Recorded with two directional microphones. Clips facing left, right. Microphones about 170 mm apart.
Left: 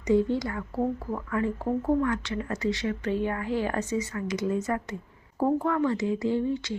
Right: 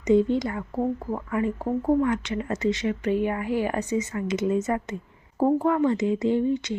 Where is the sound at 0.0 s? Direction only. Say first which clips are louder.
Right 3 dB; 20° right (ahead or behind).